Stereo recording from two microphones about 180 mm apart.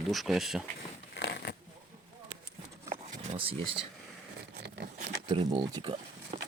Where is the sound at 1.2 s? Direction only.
65° left (ahead or behind).